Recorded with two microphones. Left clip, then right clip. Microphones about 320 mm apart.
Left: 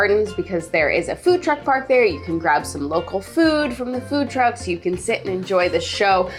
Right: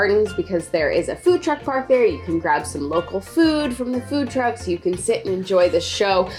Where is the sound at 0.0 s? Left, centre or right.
Centre.